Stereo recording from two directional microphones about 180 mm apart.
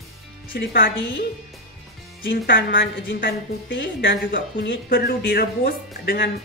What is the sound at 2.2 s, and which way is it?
A woman's voice, 90° left.